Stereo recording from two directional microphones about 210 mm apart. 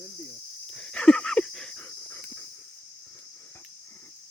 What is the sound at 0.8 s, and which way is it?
Dog, 5° left (ahead or behind).